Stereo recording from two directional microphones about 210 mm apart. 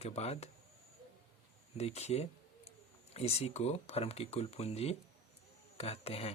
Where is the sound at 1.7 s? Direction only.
30° left (ahead or behind).